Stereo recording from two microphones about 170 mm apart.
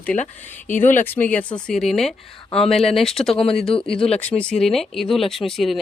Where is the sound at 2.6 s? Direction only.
35° left (ahead or behind).